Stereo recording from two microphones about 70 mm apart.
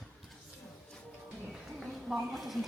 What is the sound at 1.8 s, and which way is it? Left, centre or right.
Speech, centre.